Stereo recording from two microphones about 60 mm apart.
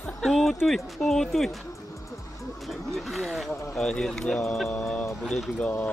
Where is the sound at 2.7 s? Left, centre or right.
Centre.